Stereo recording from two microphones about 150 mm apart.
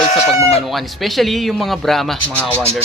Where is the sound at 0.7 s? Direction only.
Centre (ahead or behind).